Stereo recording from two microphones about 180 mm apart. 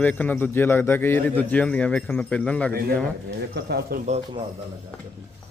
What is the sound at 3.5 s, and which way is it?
Speech, 65° right (ahead or behind).